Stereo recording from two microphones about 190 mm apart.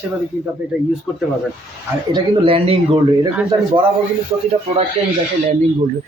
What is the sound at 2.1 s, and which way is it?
A man's voice, 30° right (ahead or behind).